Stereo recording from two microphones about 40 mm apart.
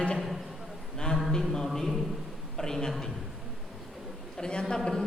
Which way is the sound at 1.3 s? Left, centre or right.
Centre.